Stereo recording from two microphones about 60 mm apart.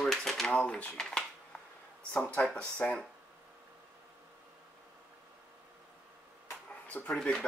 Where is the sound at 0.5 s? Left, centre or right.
Centre.